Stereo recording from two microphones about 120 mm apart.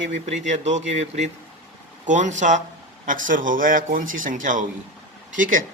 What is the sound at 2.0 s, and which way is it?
A man's voice, 85° right.